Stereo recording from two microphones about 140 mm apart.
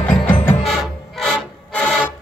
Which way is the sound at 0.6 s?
Centre (ahead or behind).